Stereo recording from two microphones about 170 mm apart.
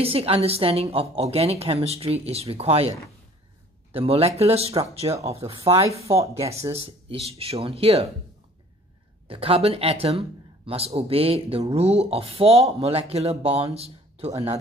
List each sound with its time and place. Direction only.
0.0 s speech: 35° right (ahead or behind)
3.9 s speech: 35° right (ahead or behind)
6.2 s speech: 20° right (ahead or behind)
6.8 s speech: 35° right (ahead or behind)
9.3 s speech: 35° right (ahead or behind)